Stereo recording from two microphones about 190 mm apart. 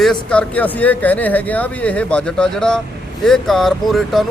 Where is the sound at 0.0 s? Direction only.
5° left (ahead or behind).